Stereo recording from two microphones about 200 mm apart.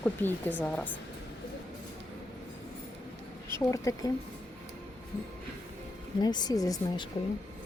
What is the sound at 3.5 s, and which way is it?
Speech, 15° left (ahead or behind).